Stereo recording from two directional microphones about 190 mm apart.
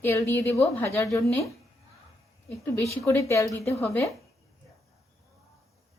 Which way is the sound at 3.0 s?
15° left (ahead or behind).